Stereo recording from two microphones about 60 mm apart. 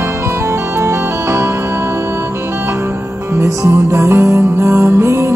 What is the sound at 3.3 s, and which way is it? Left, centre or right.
Music, right.